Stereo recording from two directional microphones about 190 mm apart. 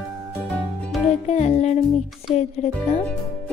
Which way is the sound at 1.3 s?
35° left (ahead or behind).